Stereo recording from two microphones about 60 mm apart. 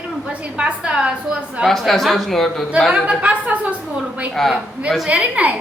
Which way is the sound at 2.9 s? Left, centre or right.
Right.